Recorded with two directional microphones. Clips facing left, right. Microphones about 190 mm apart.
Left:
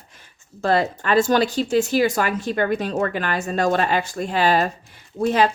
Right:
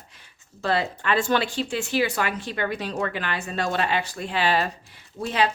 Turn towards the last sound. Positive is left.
turn(degrees=45)  # may be behind; listen again after turning